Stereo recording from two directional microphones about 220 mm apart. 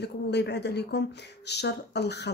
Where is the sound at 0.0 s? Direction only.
50° left (ahead or behind).